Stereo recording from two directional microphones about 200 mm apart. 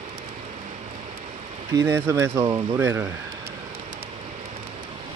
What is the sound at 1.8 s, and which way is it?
Speech, 15° right (ahead or behind).